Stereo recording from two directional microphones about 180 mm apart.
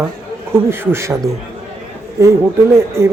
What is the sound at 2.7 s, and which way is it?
Speech, 15° right (ahead or behind).